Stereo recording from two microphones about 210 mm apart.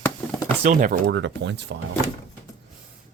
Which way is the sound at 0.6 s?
40° right (ahead or behind).